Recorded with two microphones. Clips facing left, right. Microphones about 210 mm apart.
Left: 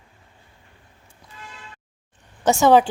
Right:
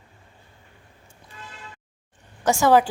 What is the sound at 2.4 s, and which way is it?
Speech, 25° left (ahead or behind).